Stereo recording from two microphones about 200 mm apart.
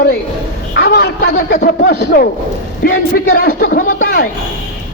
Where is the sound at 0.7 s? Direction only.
55° left (ahead or behind).